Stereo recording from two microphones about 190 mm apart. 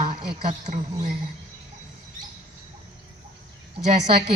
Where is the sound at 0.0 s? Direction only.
50° right (ahead or behind).